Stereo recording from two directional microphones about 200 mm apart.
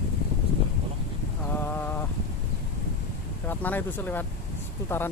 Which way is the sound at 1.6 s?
10° left (ahead or behind).